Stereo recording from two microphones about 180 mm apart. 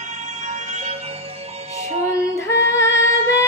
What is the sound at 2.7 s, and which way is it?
Female singing, 15° left (ahead or behind).